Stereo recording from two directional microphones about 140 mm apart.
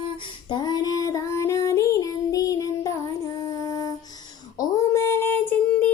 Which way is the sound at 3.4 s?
25° left (ahead or behind).